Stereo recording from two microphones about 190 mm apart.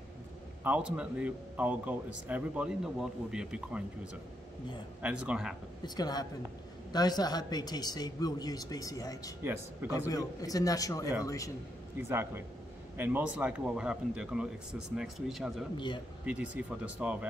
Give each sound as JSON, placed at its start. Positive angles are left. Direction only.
{"t": 0.7, "sound": "speech", "side_deg": -5}
{"t": 5.9, "sound": "speech", "side_deg": 20}
{"t": 9.4, "sound": "speech", "side_deg": -10}
{"t": 10.0, "sound": "a man's voice", "side_deg": 20}
{"t": 12.0, "sound": "speech", "side_deg": -10}